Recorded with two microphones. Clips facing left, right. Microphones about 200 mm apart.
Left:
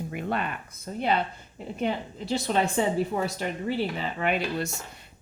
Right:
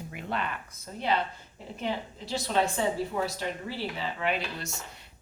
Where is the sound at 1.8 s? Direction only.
55° left (ahead or behind).